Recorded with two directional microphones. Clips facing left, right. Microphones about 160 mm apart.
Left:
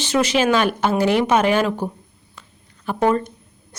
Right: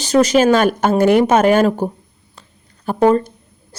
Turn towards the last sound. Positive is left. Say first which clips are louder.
# right 5 dB
turn(degrees=-35)  # may be behind; listen again after turning